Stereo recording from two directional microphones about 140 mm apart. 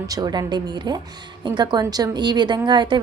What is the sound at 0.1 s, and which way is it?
A woman's voice, 25° right (ahead or behind).